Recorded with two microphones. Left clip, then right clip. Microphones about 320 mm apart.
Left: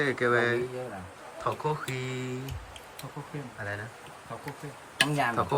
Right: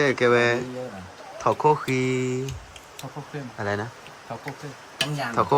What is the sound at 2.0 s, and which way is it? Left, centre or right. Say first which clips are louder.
Speech: right 11 dB; left.